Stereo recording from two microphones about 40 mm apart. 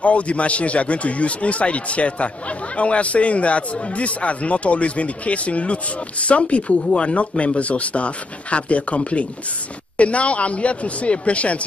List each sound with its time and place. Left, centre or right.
0.0 s a man's voice: left